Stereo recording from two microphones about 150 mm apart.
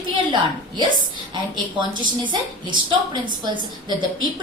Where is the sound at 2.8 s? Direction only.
30° right (ahead or behind).